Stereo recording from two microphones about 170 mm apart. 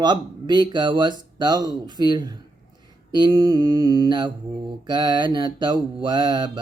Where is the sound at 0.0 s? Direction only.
25° right (ahead or behind).